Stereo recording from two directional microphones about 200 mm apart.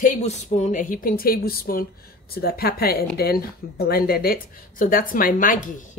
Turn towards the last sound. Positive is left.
turn(degrees=45)  # may be behind; listen again after turning